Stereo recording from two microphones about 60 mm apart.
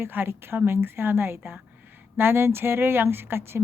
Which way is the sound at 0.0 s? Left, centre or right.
Right.